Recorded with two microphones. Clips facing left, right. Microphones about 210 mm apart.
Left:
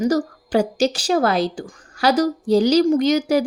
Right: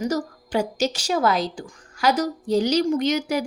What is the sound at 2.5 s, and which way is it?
Speech, 90° left.